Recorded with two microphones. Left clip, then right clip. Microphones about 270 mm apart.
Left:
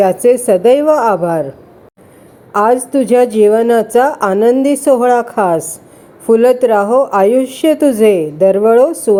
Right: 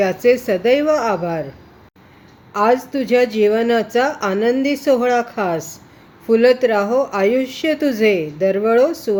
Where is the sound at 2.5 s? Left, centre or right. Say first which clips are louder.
Left 5 dB; centre.